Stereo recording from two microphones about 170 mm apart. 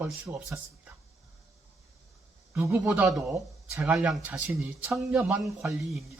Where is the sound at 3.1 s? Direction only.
Centre (ahead or behind).